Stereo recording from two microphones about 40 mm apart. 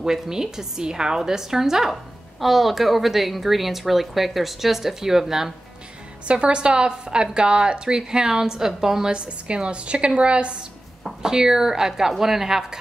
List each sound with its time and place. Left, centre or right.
0.0 s a woman's voice: centre
6.2 s a woman's voice: right
11.1 s a woman's voice: centre